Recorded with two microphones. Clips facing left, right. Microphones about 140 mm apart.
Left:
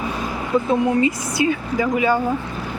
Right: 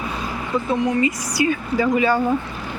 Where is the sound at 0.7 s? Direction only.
30° left (ahead or behind).